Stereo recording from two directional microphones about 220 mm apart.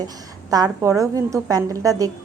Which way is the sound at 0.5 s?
15° right (ahead or behind).